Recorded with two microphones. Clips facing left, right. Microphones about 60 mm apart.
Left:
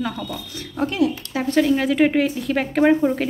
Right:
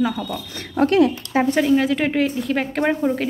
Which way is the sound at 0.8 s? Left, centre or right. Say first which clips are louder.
Right 5 dB; right.